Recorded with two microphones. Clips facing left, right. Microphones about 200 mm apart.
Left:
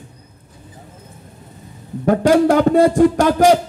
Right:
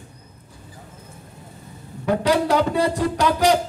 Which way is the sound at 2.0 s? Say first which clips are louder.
Left 7 dB; 50° left (ahead or behind).